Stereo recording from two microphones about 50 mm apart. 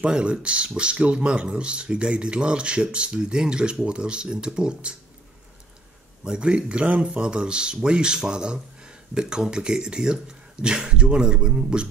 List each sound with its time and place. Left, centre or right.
0.0 s speech: right
6.2 s speech: centre